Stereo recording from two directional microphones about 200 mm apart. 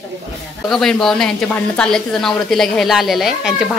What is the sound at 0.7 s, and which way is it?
A woman's voice, centre (ahead or behind).